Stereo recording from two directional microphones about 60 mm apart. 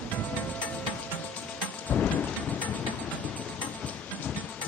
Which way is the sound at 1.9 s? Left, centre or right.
Left.